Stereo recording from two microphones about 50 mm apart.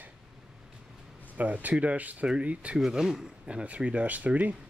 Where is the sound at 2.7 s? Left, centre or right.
Centre.